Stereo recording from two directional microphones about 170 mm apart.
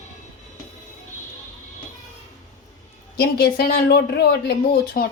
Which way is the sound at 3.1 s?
65° left (ahead or behind).